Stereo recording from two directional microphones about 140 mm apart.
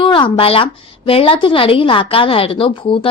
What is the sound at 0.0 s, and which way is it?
A woman's voice, 35° left (ahead or behind).